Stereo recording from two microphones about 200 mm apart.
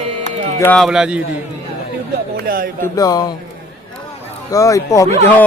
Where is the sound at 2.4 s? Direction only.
45° right (ahead or behind).